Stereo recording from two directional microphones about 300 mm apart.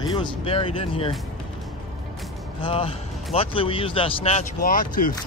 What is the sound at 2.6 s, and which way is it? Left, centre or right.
Speech, centre.